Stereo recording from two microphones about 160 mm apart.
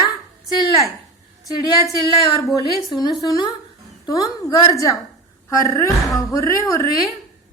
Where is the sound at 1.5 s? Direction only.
20° left (ahead or behind).